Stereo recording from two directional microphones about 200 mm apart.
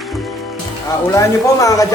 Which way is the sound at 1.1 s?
15° left (ahead or behind).